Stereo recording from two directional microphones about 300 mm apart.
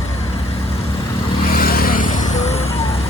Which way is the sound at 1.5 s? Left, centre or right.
Left.